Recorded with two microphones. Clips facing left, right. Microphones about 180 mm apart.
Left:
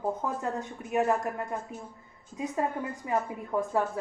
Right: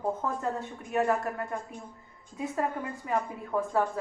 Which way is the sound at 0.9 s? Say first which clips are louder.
Left 1 dB; 20° left (ahead or behind).